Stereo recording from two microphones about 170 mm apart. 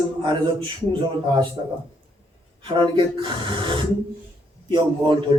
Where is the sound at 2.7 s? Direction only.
30° right (ahead or behind).